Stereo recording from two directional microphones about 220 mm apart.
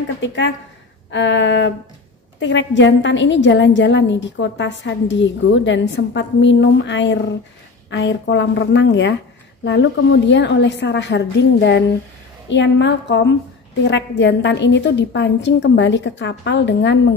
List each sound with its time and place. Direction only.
0.2 s a woman's voice: 55° left (ahead or behind)